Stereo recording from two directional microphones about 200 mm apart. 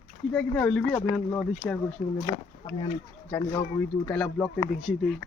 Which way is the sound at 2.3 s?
20° left (ahead or behind).